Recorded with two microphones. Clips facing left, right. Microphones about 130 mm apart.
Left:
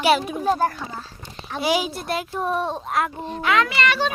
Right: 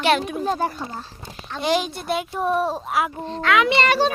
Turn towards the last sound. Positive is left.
turn(degrees=-35)  # may be behind; listen again after turning